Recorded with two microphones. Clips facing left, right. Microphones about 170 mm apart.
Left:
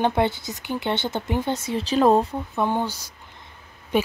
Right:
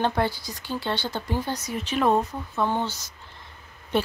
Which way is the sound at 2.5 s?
15° left (ahead or behind).